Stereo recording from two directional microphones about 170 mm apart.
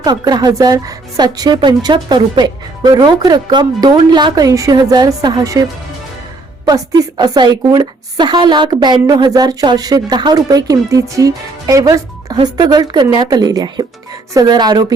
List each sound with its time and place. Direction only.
0.0 s a woman's voice: 25° right (ahead or behind)
6.7 s a woman's voice: 20° right (ahead or behind)